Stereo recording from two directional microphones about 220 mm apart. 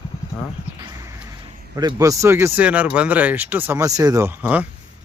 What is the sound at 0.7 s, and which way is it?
Speech, 15° right (ahead or behind).